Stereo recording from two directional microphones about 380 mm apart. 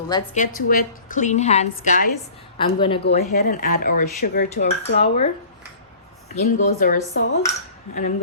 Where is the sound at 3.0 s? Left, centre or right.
Left.